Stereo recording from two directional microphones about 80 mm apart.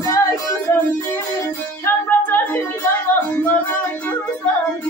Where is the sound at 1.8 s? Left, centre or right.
Left.